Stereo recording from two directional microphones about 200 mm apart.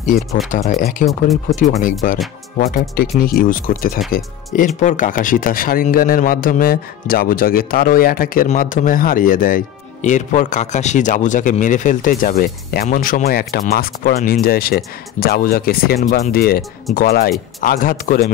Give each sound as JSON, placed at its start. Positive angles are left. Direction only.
{"t": 0.7, "sound": "a man's voice", "side_deg": 45}
{"t": 4.0, "sound": "speech", "side_deg": 0}
{"t": 4.5, "sound": "a man's voice", "side_deg": 40}
{"t": 16.0, "sound": "speech", "side_deg": 35}
{"t": 16.3, "sound": "a man's voice", "side_deg": 50}